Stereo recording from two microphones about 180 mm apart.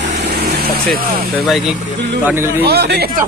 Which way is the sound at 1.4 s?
Centre (ahead or behind).